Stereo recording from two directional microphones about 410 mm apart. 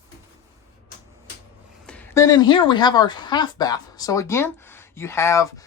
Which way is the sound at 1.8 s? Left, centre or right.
Centre.